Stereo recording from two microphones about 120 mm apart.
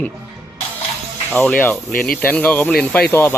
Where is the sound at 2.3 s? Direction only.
10° left (ahead or behind).